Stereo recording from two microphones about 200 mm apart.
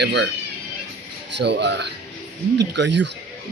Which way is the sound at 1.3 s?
60° right (ahead or behind).